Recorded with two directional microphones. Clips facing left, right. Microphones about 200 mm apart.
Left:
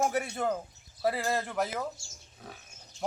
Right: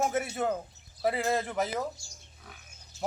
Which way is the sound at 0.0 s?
5° right (ahead or behind).